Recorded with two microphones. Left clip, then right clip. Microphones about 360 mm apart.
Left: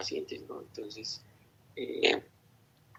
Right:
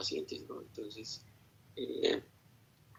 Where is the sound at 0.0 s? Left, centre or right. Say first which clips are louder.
Left 2 dB; left.